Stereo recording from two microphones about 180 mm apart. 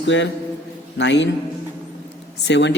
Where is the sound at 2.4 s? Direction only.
75° left (ahead or behind).